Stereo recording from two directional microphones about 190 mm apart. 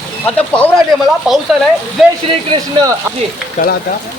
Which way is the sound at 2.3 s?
25° right (ahead or behind).